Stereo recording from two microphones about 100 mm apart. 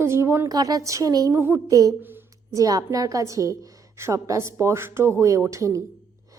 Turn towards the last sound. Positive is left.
turn(degrees=-30)  # may be behind; listen again after turning